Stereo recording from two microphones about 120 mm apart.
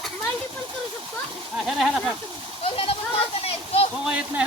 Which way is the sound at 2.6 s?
55° left (ahead or behind).